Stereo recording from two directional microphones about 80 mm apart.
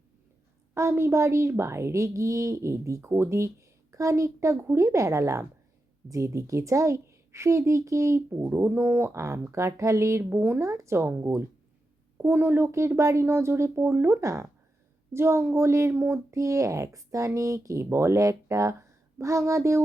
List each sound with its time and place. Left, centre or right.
0.7 s speech: right
10.2 s speech: right